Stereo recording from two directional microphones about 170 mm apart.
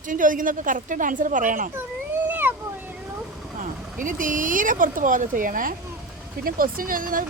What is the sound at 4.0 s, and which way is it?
Speech, 50° right (ahead or behind).